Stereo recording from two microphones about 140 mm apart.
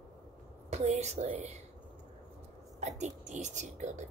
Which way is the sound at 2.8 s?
55° right (ahead or behind).